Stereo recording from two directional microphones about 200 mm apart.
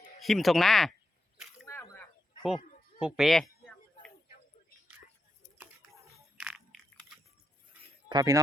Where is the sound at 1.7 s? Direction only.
15° left (ahead or behind).